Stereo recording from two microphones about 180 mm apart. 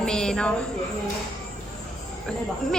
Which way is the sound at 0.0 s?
5° left (ahead or behind).